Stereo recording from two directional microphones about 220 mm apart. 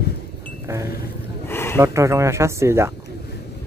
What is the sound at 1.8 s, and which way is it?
Speech, 15° right (ahead or behind).